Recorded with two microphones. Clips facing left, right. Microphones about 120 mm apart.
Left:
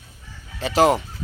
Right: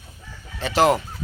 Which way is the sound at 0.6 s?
35° left (ahead or behind).